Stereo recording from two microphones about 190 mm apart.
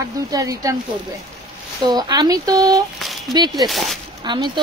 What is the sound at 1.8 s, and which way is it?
Speech, 20° right (ahead or behind).